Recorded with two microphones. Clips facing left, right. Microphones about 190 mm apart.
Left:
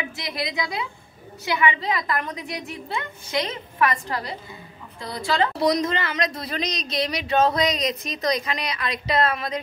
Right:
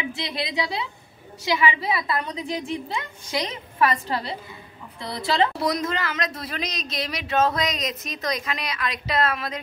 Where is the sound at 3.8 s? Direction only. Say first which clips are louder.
Right 1 dB; 30° right (ahead or behind).